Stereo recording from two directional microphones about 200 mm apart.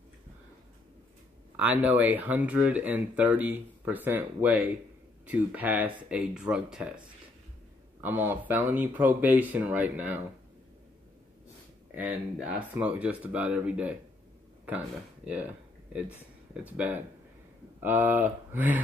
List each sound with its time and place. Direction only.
1.6 s speech: 10° right (ahead or behind)
8.0 s speech: 10° right (ahead or behind)
11.9 s speech: 10° right (ahead or behind)
15.2 s a sound: 5° right (ahead or behind)
16.6 s speech: 10° right (ahead or behind)